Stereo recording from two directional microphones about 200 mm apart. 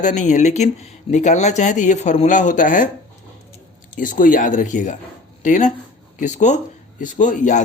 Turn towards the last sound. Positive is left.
turn(degrees=40)  # may be behind; listen again after turning